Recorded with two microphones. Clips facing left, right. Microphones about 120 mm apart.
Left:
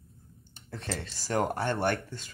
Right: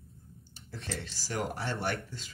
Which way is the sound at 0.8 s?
40° left (ahead or behind).